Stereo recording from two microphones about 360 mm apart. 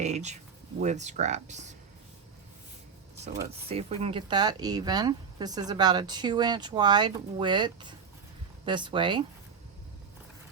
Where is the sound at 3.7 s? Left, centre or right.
Centre.